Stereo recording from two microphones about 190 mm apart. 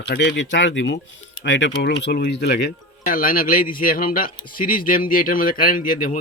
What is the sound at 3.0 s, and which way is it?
Speech, 45° left (ahead or behind).